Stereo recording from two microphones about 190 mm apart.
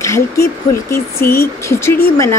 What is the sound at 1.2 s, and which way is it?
Speech, 55° left (ahead or behind).